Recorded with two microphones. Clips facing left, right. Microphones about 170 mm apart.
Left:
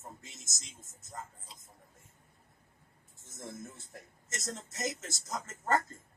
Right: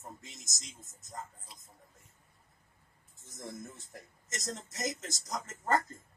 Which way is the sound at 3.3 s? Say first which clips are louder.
Right 1 dB; 15° right (ahead or behind).